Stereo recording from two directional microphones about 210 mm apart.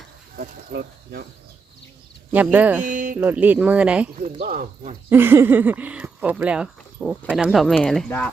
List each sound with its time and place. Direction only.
0.3 s speech: 50° right (ahead or behind)
2.3 s speech: 5° right (ahead or behind)
2.8 s speech: 40° right (ahead or behind)
3.2 s speech: 10° right (ahead or behind)
4.2 s speech: 35° right (ahead or behind)
5.0 s speech: 10° right (ahead or behind)